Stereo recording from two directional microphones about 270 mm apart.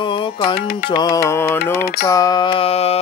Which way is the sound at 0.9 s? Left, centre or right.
Centre.